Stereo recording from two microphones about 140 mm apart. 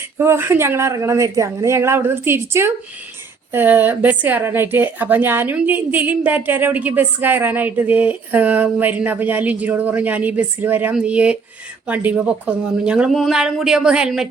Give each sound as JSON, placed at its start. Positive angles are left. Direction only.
{"t": 0.2, "sound": "a woman's voice", "side_deg": -15}